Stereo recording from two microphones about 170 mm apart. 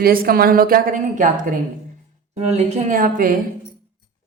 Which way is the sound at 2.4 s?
40° right (ahead or behind).